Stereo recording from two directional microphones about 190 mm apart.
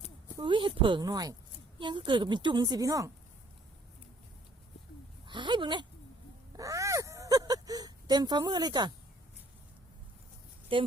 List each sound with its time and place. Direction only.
0.3 s a woman's voice: 25° right (ahead or behind)
5.2 s speech: 25° right (ahead or behind)
6.6 s a sound: 15° right (ahead or behind)
10.7 s a woman's voice: 25° right (ahead or behind)